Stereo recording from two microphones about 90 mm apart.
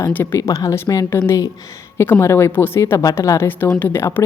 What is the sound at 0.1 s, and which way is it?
Speech, 20° left (ahead or behind).